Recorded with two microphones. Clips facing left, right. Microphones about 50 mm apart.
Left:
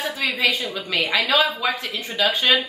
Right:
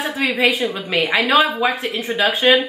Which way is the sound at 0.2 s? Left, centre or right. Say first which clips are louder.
Right 5 dB; centre.